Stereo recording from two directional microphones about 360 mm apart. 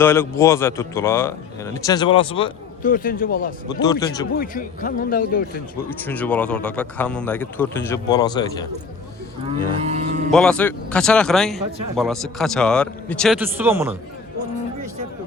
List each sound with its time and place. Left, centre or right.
0.0 s a man's voice: centre; by 3.5 s left
3.7 s a man's voice: centre
4.4 s speech: left
6.1 s speech: centre
9.8 s a sound: centre
10.3 s speech: centre